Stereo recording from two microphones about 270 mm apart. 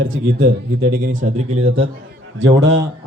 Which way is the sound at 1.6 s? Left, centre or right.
Right.